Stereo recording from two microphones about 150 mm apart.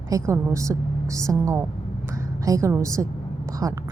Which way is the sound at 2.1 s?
20° right (ahead or behind).